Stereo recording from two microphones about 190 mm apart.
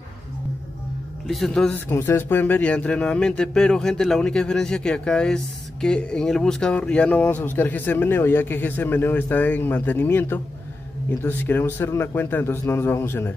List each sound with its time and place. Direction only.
1.2 s speech: centre (ahead or behind)